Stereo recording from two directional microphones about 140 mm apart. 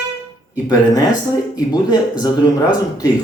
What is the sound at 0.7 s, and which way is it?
Speech, 25° left (ahead or behind).